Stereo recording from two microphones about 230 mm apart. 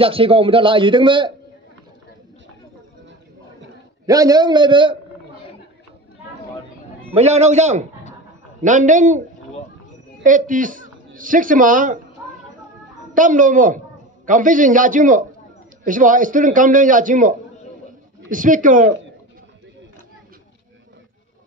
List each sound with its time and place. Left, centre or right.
0.0 s a man's voice: right
4.0 s a man's voice: centre
7.2 s a man's voice: right
10.2 s a man's voice: right
13.1 s a man's voice: right